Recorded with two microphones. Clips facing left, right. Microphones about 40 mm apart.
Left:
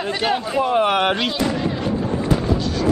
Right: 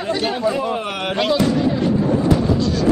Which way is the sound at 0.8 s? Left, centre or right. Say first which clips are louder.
Left 7 dB; left.